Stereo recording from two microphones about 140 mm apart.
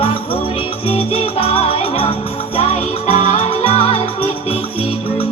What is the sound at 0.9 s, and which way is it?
Music, 45° left (ahead or behind).